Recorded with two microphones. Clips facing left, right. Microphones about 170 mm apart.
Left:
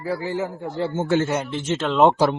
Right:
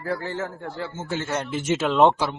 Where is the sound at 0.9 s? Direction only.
60° left (ahead or behind).